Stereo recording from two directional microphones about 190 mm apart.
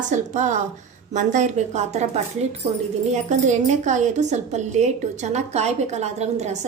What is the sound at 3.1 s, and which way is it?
A woman's voice, 40° right (ahead or behind).